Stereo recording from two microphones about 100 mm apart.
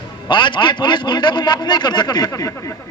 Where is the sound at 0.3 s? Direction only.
50° left (ahead or behind).